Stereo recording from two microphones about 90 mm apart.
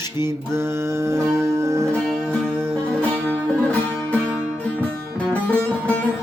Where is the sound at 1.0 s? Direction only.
30° right (ahead or behind).